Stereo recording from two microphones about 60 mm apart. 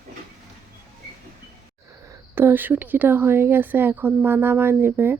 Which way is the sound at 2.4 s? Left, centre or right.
Right.